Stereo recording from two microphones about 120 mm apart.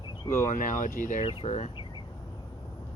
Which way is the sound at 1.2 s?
50° left (ahead or behind).